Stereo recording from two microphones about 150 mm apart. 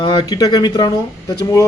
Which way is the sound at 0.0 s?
30° left (ahead or behind).